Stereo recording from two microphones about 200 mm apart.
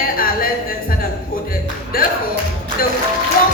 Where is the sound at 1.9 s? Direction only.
45° left (ahead or behind).